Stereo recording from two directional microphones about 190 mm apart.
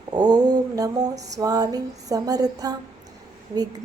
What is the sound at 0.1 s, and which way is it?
Mantra, 20° right (ahead or behind).